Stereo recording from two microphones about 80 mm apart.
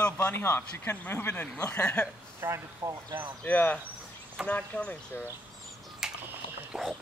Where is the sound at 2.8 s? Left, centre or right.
Right.